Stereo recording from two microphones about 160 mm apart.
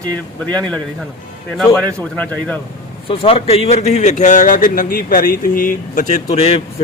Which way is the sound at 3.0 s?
35° left (ahead or behind).